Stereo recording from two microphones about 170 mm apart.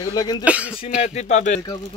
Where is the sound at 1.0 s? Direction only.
40° left (ahead or behind).